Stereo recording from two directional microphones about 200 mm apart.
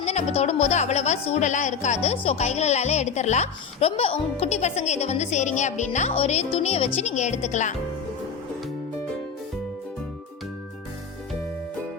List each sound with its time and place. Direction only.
0.0 s a woman's voice: 35° left (ahead or behind)